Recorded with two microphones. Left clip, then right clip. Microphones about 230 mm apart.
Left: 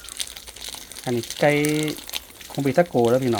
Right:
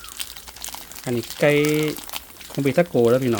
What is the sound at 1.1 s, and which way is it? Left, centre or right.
Speech, centre.